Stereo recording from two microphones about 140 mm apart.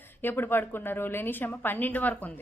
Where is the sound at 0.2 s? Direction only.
15° left (ahead or behind).